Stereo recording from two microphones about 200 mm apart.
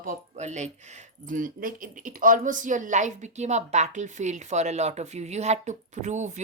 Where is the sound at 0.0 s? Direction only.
40° right (ahead or behind).